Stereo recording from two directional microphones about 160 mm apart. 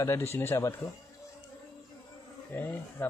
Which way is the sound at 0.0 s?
15° left (ahead or behind).